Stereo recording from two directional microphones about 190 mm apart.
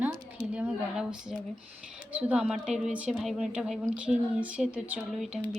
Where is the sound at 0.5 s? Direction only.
5° right (ahead or behind).